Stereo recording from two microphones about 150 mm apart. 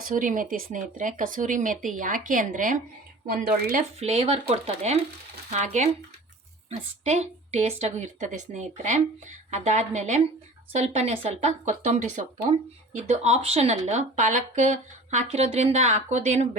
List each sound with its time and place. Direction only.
0.0 s speech: 65° right (ahead or behind)
4.0 s speech: 45° right (ahead or behind)